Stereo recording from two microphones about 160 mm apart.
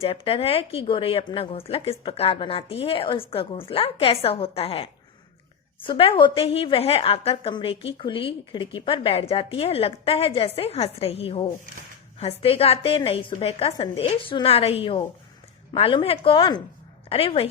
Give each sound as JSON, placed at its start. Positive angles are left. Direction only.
{"t": 0.0, "sound": "a woman's voice", "side_deg": 35}